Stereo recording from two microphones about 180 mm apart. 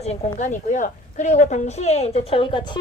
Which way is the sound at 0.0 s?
40° left (ahead or behind).